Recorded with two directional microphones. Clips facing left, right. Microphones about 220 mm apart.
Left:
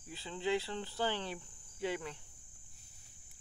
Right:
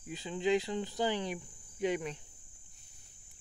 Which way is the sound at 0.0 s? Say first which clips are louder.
Right 5 dB; 15° right (ahead or behind).